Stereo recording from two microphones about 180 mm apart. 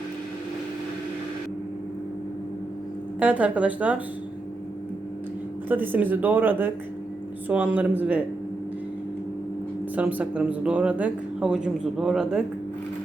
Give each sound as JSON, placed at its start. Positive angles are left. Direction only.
{"t": 3.2, "sound": "speech", "side_deg": -10}
{"t": 5.6, "sound": "speech", "side_deg": -10}
{"t": 9.9, "sound": "speech", "side_deg": -10}